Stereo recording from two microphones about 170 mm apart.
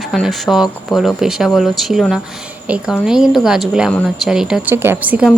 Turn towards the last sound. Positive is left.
turn(degrees=-10)  # may be behind; listen again after turning